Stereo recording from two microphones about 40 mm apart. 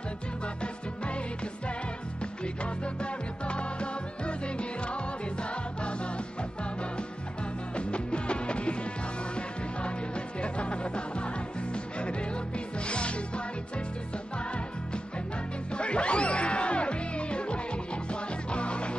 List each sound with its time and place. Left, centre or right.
0.6 s music: left
2.4 s music: left
7.7 s music: left
15.7 s music: left